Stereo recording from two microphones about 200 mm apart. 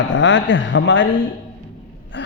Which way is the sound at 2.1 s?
65° left (ahead or behind).